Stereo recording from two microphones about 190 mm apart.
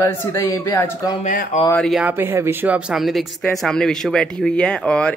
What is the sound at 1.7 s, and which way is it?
Speech, centre (ahead or behind).